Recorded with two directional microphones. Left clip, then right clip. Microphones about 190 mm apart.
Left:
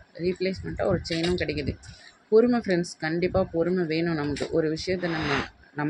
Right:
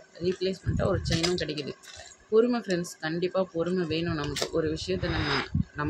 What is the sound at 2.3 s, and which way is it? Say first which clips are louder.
Speech: left 3 dB; 15° left (ahead or behind).